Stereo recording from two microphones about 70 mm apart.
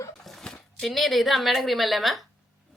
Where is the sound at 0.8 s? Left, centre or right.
Centre.